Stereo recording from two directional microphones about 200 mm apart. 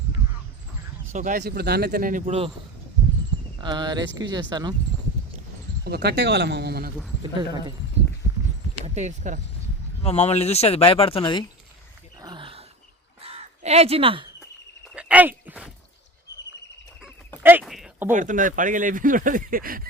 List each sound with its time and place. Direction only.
1.1 s speech: 40° right (ahead or behind)
1.4 s speech: 55° right (ahead or behind); by 2.5 s 30° right (ahead or behind)
3.6 s speech: 20° right (ahead or behind)
5.8 s speech: 55° right (ahead or behind)
8.8 s speech: 35° right (ahead or behind)
10.0 s speech: 30° left (ahead or behind)
12.2 s a sound: 25° right (ahead or behind)
13.2 s crow: 30° right (ahead or behind)
14.9 s a sound: 5° right (ahead or behind)
17.4 s a sound: 5° right (ahead or behind)
18.1 s speech: 40° right (ahead or behind)